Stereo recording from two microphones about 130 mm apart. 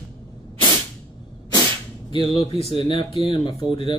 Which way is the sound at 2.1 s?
45° left (ahead or behind).